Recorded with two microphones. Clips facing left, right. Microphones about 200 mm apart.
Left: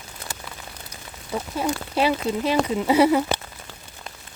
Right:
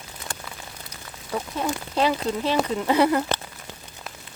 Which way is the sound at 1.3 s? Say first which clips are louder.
Left 1 dB; 5° left (ahead or behind).